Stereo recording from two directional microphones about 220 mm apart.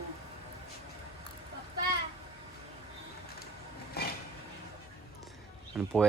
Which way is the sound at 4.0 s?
45° left (ahead or behind).